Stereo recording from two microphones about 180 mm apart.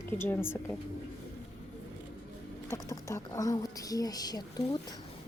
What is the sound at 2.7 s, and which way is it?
Speech, 15° left (ahead or behind).